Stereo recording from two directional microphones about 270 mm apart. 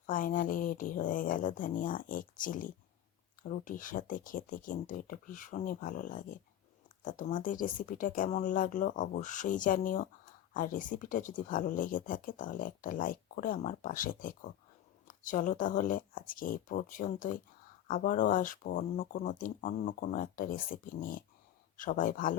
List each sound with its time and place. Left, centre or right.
0.0 s speech: left